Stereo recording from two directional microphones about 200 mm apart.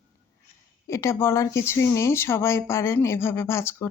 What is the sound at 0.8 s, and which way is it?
Speech, 15° left (ahead or behind).